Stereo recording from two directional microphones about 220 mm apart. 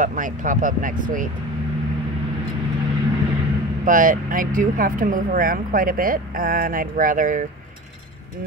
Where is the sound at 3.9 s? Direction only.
40° right (ahead or behind).